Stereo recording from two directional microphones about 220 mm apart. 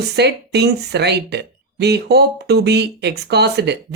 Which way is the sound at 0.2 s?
50° right (ahead or behind).